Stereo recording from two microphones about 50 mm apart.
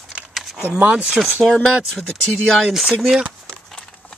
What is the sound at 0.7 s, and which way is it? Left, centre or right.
Speech, right.